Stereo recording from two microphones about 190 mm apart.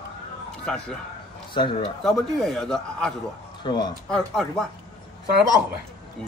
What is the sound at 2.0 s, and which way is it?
A man's voice, centre (ahead or behind).